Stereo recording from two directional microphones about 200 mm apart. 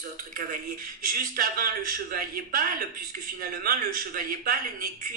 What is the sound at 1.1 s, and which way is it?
Speech, 45° right (ahead or behind).